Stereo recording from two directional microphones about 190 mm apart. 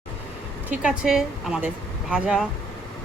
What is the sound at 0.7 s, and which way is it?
A woman's voice, 5° right (ahead or behind).